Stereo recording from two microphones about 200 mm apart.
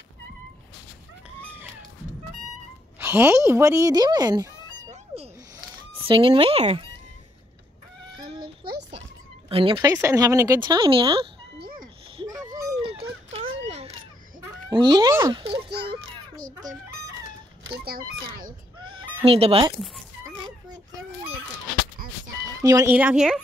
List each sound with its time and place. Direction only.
3.0 s speech: 10° right (ahead or behind)
5.1 s a sound: 30° right (ahead or behind)
6.0 s a child's voice: 25° right (ahead or behind)
8.2 s a sound: 25° right (ahead or behind)
9.5 s speech: 25° right (ahead or behind)
12.2 s a sound: 20° right (ahead or behind)
13.3 s a sound: 30° right (ahead or behind)
14.7 s a child's voice: 20° right (ahead or behind)
16.3 s chicken: 40° right (ahead or behind)
17.6 s speech: 50° right (ahead or behind)
18.8 s fowl: 25° right (ahead or behind)
22.6 s speech: 15° right (ahead or behind)